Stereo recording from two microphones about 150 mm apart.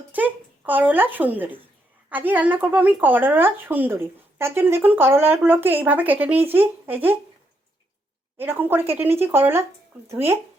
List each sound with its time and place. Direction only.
0.1 s speech: 10° right (ahead or behind)
8.4 s speech: 15° right (ahead or behind)